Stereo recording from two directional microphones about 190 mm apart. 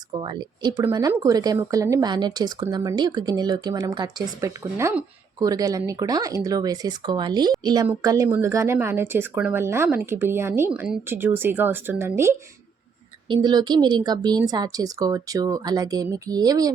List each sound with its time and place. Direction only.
0.2 s a woman's voice: 25° right (ahead or behind)
13.2 s speech: 25° right (ahead or behind)